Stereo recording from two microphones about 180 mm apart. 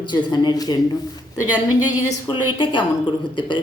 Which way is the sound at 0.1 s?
25° left (ahead or behind).